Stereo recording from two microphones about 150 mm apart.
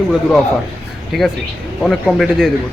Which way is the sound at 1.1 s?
Centre (ahead or behind).